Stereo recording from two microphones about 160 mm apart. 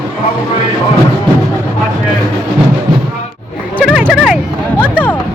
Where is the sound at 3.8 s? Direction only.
5° right (ahead or behind).